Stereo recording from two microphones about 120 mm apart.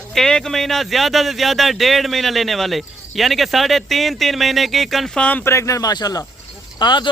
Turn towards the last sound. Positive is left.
turn(degrees=40)  # may be behind; listen again after turning